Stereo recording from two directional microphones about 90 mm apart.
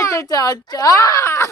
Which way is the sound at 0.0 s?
35° left (ahead or behind).